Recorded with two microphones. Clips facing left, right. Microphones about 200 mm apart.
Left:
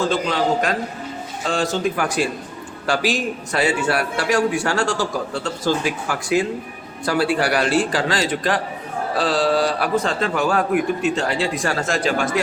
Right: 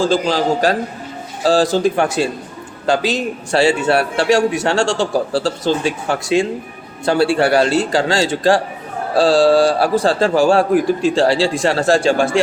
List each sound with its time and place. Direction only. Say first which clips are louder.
0.0 s a man's voice: right 4 dB; 30° right (ahead or behind)